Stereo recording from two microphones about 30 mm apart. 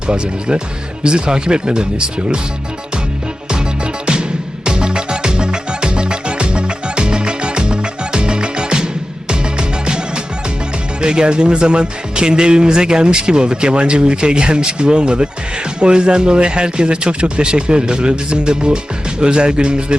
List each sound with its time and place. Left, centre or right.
0.1 s speech: right
4.0 s music: right
11.0 s speech: right